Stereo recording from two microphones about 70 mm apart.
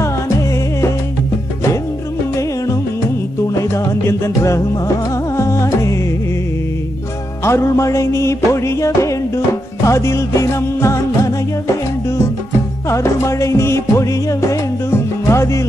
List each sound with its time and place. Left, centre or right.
3.4 s music: left
7.4 s music: left
12.9 s music: left